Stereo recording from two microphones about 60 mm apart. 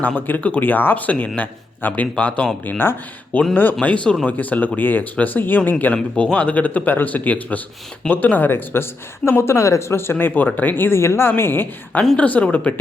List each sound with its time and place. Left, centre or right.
0.0 s a man's voice: left
2.6 s speech: left
3.8 s speech: centre
4.3 s a man's voice: left
5.9 s a man's voice: centre; by 11.7 s left
12.1 s a man's voice: left